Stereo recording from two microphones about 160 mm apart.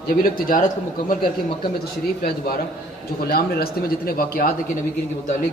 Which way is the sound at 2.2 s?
70° left (ahead or behind).